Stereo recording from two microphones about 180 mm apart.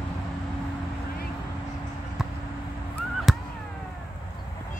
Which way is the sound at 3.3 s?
Centre (ahead or behind).